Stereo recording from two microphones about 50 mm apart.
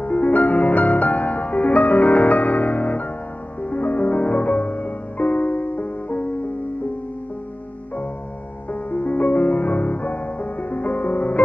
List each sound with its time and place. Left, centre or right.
0.0 s music: left
8.9 s music: left